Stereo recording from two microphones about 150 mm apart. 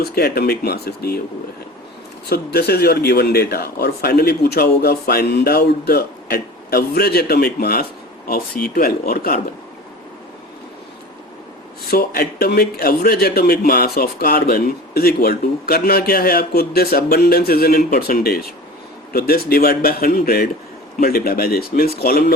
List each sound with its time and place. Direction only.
0.0 s a man's voice: 90° left
2.3 s a man's voice: 90° left
11.9 s a man's voice: 85° left